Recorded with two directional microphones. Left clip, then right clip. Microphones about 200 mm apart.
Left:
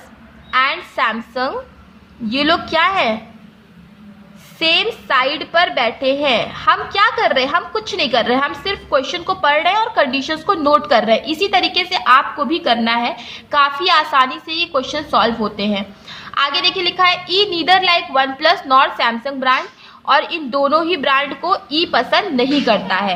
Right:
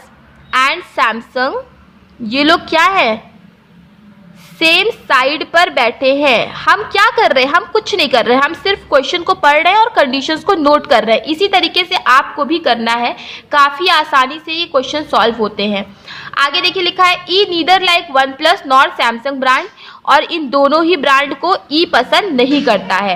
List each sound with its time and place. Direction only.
0.5 s a woman's voice: 25° right (ahead or behind)
4.6 s a woman's voice: 30° right (ahead or behind)